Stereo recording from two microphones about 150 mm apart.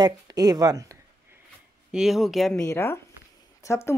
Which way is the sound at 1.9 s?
5° right (ahead or behind).